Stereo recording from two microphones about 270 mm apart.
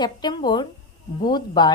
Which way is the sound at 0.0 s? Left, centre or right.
Centre.